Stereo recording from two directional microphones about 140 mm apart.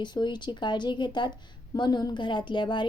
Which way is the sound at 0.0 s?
30° left (ahead or behind).